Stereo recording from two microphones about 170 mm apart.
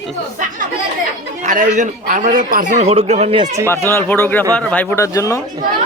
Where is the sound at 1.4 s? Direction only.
50° right (ahead or behind).